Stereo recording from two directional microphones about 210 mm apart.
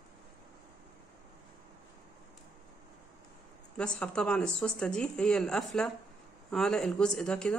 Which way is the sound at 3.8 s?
5° left (ahead or behind).